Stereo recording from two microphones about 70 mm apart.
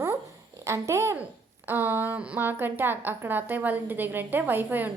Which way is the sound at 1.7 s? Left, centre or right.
Right.